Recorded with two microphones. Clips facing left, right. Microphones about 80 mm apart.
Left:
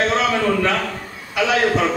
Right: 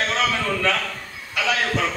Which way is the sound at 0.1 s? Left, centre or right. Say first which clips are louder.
Left 5 dB; left.